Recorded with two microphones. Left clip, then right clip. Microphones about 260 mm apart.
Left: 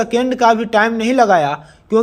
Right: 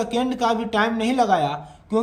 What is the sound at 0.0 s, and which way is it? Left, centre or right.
A man's voice, centre.